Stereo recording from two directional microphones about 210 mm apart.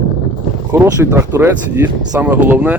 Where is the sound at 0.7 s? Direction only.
10° right (ahead or behind).